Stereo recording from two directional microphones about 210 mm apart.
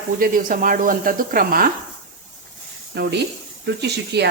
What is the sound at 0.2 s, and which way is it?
A woman's voice, 40° right (ahead or behind).